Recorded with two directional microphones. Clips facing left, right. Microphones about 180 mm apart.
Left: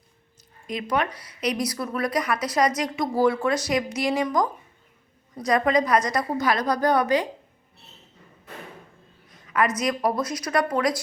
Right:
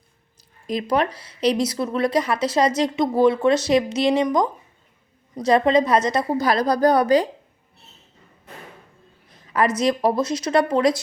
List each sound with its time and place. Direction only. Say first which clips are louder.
0.7 s speech: right 4 dB; 35° right (ahead or behind)
9.5 s speech: right 4 dB; 30° right (ahead or behind)